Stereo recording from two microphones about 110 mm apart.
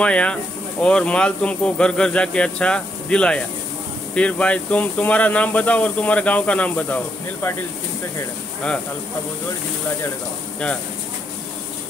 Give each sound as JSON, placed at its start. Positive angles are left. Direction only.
{"t": 0.0, "sound": "speech", "side_deg": 10}